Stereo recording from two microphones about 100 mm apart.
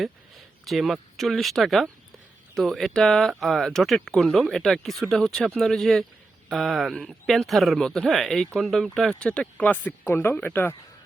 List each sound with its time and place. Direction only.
0.6 s speech: centre (ahead or behind)
10.1 s speech: 25° left (ahead or behind)